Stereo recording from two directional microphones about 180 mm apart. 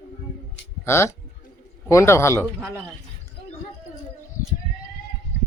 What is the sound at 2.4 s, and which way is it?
Speech, 10° right (ahead or behind).